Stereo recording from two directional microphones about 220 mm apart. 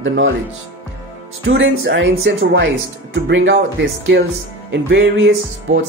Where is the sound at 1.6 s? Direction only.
60° right (ahead or behind).